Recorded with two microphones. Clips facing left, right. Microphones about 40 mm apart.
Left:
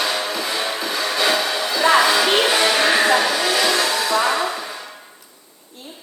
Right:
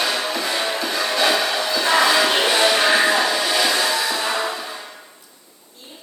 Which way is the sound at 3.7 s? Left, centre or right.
Centre.